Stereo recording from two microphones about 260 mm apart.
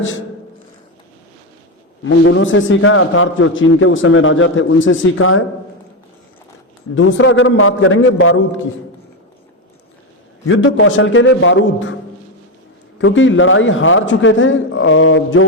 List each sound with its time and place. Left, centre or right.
2.0 s a man's voice: left
6.9 s a man's voice: left
10.5 s a man's voice: left
13.0 s a man's voice: left